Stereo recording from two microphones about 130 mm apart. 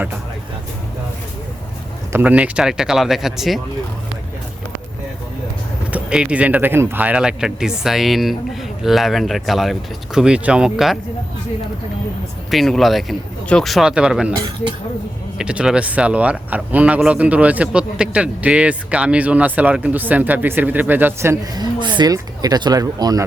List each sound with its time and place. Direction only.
2.1 s speech: 10° right (ahead or behind)
5.9 s speech: 10° right (ahead or behind)
12.5 s speech: centre (ahead or behind)
15.4 s speech: 5° right (ahead or behind)
21.5 s speech: 35° right (ahead or behind)